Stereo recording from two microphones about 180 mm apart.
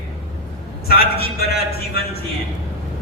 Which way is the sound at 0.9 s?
60° left (ahead or behind).